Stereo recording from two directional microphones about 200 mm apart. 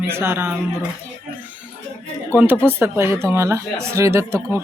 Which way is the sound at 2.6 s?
10° right (ahead or behind).